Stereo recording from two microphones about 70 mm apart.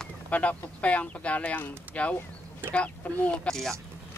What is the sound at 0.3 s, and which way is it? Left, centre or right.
Speech, left.